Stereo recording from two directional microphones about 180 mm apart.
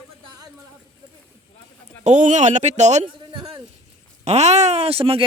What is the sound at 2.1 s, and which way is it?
A man's voice, 40° right (ahead or behind).